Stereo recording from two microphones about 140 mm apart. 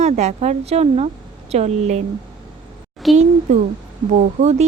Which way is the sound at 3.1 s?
55° right (ahead or behind).